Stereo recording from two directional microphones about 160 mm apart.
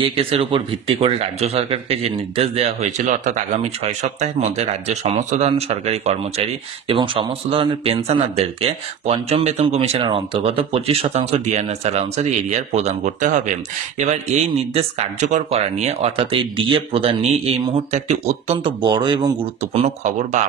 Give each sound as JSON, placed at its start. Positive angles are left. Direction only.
{"t": 0.0, "sound": "speech", "side_deg": -35}
{"t": 18.8, "sound": "speech", "side_deg": -30}
{"t": 19.6, "sound": "speech", "side_deg": -40}